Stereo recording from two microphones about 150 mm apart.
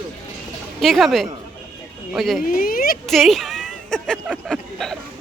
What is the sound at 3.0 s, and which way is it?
A woman's voice, centre (ahead or behind).